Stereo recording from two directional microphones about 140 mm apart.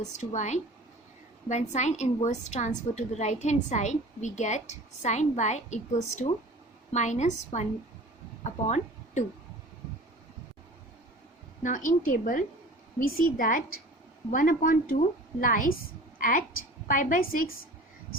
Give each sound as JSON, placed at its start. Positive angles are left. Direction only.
{"t": 0.2, "sound": "a woman's voice", "side_deg": 60}
{"t": 11.6, "sound": "a woman's voice", "side_deg": 65}
{"t": 14.3, "sound": "a woman's voice", "side_deg": 70}